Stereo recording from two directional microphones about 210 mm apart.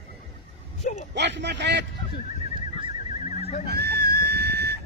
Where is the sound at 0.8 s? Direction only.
30° left (ahead or behind).